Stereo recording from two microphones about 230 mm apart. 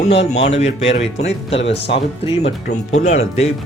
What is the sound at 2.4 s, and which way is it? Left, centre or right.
Speech, left.